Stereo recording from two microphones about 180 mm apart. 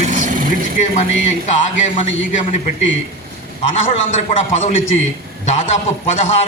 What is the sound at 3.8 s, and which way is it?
A man's voice, 35° left (ahead or behind).